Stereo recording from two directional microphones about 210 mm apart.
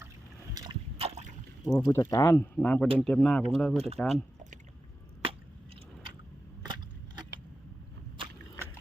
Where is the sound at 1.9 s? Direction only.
15° left (ahead or behind).